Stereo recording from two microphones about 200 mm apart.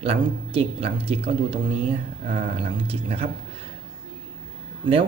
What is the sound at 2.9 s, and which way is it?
Speech, 30° right (ahead or behind).